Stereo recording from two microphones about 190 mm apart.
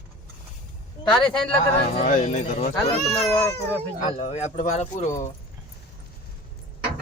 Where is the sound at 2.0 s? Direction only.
35° left (ahead or behind).